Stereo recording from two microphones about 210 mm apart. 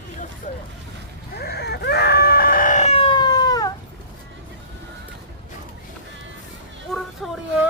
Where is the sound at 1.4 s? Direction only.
50° left (ahead or behind); by 3.7 s 20° left (ahead or behind).